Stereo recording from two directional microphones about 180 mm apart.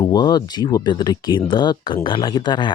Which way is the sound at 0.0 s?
25° left (ahead or behind).